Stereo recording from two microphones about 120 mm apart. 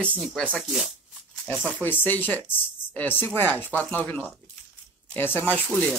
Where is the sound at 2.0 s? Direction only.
15° left (ahead or behind).